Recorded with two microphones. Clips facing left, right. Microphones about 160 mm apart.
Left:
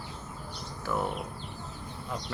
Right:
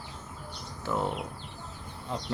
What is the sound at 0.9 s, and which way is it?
Speech, 20° right (ahead or behind).